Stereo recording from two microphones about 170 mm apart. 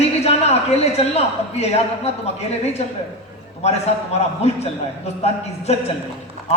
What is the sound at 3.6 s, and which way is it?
Speech, 40° left (ahead or behind).